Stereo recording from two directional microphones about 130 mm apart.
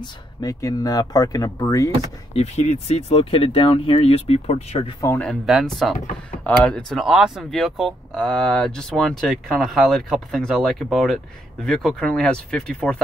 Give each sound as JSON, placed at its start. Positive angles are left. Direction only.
{"t": 0.0, "sound": "speech", "side_deg": 30}
{"t": 2.3, "sound": "speech", "side_deg": 60}
{"t": 5.2, "sound": "speech", "side_deg": 0}